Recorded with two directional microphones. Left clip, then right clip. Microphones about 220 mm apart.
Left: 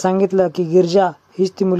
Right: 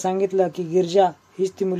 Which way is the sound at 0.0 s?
35° left (ahead or behind).